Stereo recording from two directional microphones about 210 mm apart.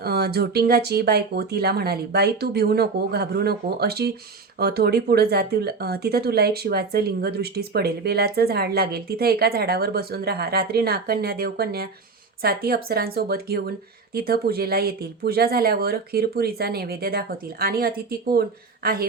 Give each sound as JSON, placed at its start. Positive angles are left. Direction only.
{"t": 0.0, "sound": "speech", "side_deg": -50}